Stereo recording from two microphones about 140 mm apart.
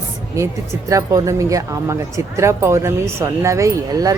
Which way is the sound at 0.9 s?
25° right (ahead or behind).